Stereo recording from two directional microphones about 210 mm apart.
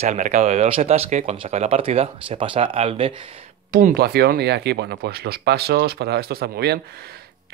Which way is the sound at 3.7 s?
40° right (ahead or behind).